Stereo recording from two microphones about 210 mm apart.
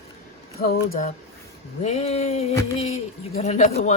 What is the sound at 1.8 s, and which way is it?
Speech, 30° left (ahead or behind).